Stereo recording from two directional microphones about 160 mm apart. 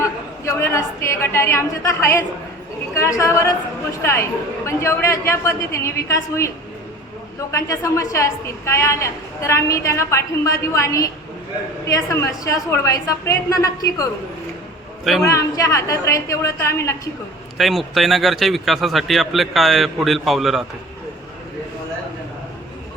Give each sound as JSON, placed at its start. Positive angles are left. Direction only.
{"t": 0.0, "sound": "a woman's voice", "side_deg": 15}
{"t": 7.5, "sound": "a woman's voice", "side_deg": 20}
{"t": 15.2, "sound": "a woman's voice", "side_deg": 20}
{"t": 17.6, "sound": "a man's voice", "side_deg": 0}